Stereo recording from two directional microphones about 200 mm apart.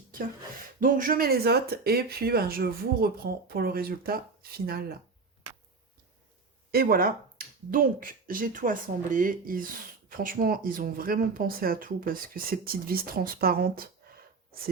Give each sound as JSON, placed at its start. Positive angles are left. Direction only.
{"t": 0.8, "sound": "speech", "side_deg": -40}
{"t": 6.7, "sound": "speech", "side_deg": -50}